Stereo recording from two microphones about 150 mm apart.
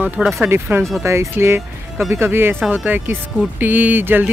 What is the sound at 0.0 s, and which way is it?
Speech, 10° right (ahead or behind).